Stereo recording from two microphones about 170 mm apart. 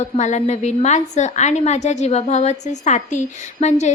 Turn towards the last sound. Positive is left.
turn(degrees=45)  # may be behind; listen again after turning